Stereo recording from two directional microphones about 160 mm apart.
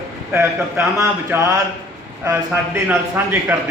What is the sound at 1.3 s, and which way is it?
Speech, 15° right (ahead or behind).